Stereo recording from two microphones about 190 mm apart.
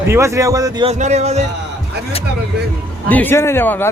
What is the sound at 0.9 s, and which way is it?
Speech, 35° right (ahead or behind).